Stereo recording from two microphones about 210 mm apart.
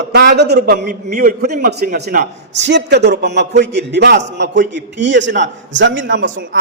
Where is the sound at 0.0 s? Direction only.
55° right (ahead or behind).